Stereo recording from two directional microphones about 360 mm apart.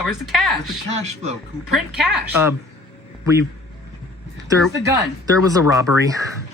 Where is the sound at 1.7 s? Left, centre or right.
Centre.